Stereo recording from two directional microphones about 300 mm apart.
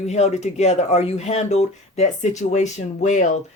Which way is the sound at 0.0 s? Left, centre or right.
Left.